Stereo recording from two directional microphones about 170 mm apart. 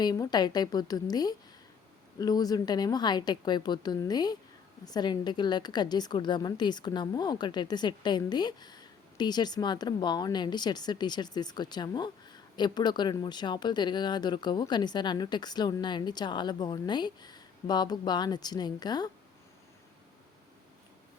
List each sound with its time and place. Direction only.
0.0 s a woman's voice: 25° left (ahead or behind)